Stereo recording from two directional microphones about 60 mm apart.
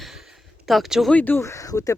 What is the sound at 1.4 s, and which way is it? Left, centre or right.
Speech, left.